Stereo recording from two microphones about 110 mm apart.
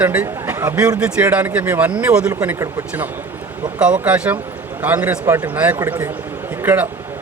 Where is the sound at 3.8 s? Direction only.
10° right (ahead or behind).